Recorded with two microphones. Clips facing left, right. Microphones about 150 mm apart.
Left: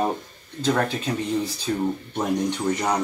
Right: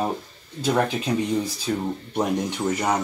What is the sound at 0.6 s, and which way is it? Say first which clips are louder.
Speech: right 1 dB; 10° right (ahead or behind).